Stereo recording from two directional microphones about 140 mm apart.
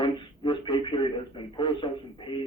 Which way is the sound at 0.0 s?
35° left (ahead or behind).